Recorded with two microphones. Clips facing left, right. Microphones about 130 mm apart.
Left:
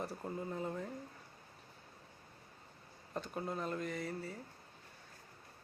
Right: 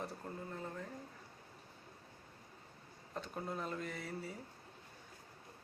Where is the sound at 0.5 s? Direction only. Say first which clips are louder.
Left 6 dB; 15° left (ahead or behind).